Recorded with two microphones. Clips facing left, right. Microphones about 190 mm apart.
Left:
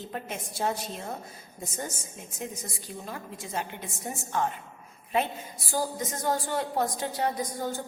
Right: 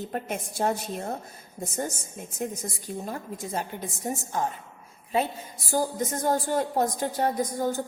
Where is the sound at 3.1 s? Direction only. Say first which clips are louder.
Right 2 dB; 40° right (ahead or behind).